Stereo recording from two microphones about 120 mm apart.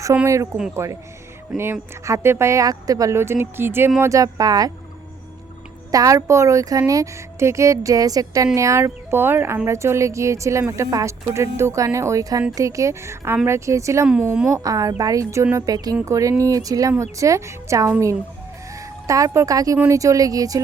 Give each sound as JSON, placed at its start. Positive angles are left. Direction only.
{"t": 0.1, "sound": "speech", "side_deg": -20}
{"t": 5.9, "sound": "speech", "side_deg": -30}
{"t": 14.1, "sound": "a woman's voice", "side_deg": -15}
{"t": 14.5, "sound": "speech", "side_deg": -30}
{"t": 19.0, "sound": "speech", "side_deg": -25}